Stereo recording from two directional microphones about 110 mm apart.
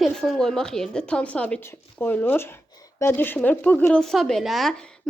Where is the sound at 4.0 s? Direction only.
5° left (ahead or behind).